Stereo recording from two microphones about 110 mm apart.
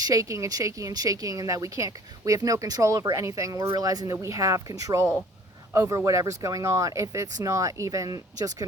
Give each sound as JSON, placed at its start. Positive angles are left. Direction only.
{"t": 0.0, "sound": "a woman's voice", "side_deg": -30}